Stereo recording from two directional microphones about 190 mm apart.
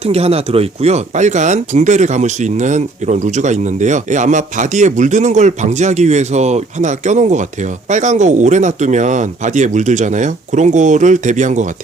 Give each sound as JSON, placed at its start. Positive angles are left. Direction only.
{"t": 0.0, "sound": "speech", "side_deg": -35}